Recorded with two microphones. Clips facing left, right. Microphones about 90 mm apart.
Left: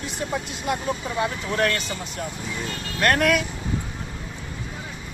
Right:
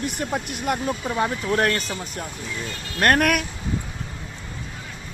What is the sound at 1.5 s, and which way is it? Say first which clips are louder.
Speech: right 1 dB; 40° right (ahead or behind).